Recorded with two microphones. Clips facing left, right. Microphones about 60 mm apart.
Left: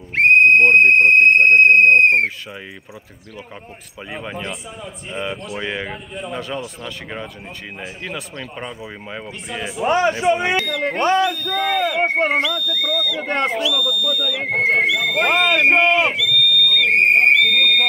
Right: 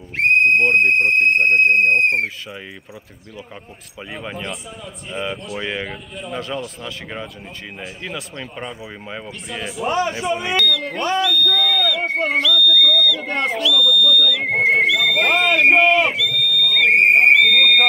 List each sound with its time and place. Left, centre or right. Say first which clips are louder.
0.1 s speech: left 3 dB; left
4.1 s speech: left 1 dB; centre
9.8 s speech: left 4 dB; left
10.7 s speech: left 3 dB; left
12.4 s whistle: right 4 dB; left; by 14.4 s centre
14.4 s speech: left 2 dB; centre
16.8 s whistle: right 2 dB; centre